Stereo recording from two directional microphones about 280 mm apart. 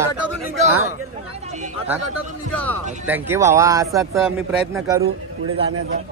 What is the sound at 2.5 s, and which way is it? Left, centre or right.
Speech, centre.